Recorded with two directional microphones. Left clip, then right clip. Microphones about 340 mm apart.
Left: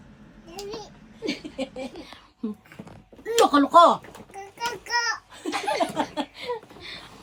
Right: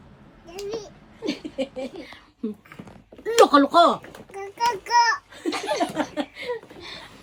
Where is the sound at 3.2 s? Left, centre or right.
Centre.